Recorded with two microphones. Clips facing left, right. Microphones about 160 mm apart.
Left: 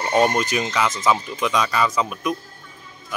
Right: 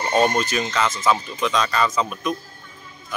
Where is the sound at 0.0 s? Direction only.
10° left (ahead or behind).